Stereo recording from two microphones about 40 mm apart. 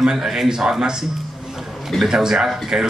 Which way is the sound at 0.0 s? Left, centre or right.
Centre.